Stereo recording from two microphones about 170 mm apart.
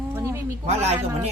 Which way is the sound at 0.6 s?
40° right (ahead or behind).